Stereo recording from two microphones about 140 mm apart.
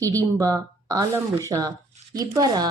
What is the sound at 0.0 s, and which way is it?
Speech, 25° right (ahead or behind).